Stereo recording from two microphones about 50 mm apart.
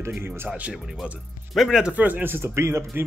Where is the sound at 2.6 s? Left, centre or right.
Right.